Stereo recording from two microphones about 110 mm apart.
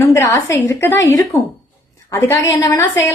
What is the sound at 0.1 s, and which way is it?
A woman's voice, 30° left (ahead or behind).